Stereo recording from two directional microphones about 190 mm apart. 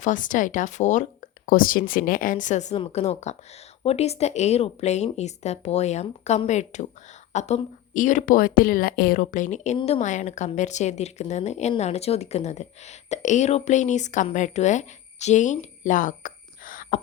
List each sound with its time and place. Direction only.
0.0 s a woman's voice: 45° left (ahead or behind)